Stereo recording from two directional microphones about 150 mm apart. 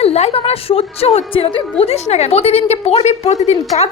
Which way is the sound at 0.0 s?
45° left (ahead or behind).